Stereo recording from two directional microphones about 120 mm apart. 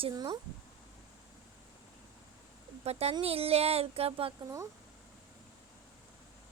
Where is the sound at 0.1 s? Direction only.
35° right (ahead or behind).